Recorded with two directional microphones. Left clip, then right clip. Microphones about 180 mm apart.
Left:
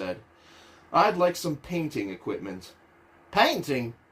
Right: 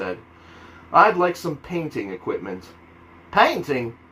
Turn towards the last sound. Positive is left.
turn(degrees=55)  # may be behind; listen again after turning